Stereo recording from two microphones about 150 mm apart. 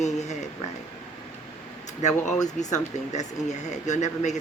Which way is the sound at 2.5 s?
50° left (ahead or behind).